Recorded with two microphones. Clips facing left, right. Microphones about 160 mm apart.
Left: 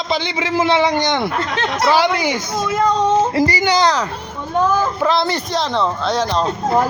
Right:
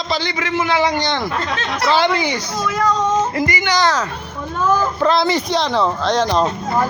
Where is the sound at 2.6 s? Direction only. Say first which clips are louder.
Left 2 dB; 25° left (ahead or behind).